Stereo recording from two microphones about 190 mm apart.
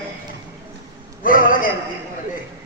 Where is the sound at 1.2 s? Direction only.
45° left (ahead or behind).